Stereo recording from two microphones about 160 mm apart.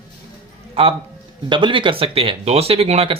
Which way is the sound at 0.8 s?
35° right (ahead or behind).